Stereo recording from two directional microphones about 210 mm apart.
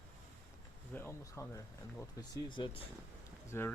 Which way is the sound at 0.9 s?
15° left (ahead or behind).